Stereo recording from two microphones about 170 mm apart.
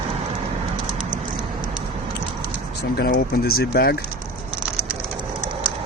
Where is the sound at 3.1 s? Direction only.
65° left (ahead or behind).